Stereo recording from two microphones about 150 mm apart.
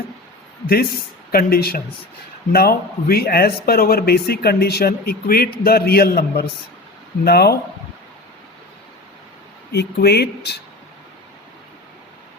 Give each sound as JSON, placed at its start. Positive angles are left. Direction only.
{"t": 1.3, "sound": "speech", "side_deg": 90}
{"t": 9.7, "sound": "speech", "side_deg": 90}